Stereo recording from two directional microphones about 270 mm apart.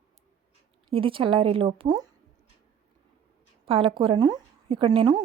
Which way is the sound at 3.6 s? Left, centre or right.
Centre.